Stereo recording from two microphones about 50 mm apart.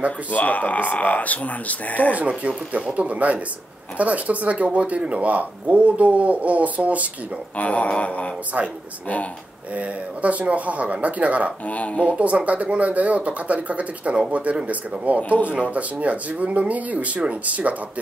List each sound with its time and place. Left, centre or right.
0.3 s speech: left
2.1 s speech: right
7.5 s speech: left
8.5 s speech: right
9.8 s speech: right
11.6 s speech: left
12.1 s speech: right